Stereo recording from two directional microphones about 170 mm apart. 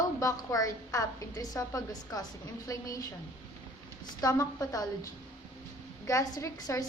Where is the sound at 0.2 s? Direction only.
20° left (ahead or behind).